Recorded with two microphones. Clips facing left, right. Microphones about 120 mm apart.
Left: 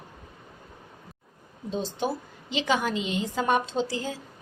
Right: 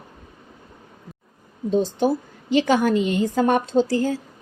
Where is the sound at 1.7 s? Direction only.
45° right (ahead or behind).